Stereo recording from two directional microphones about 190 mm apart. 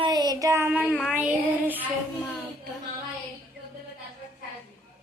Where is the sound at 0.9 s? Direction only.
5° left (ahead or behind).